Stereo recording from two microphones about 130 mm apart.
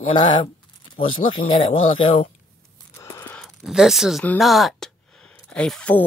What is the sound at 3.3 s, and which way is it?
Speech, centre (ahead or behind).